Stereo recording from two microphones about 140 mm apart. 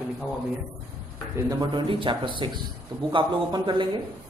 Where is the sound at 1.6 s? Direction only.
35° right (ahead or behind).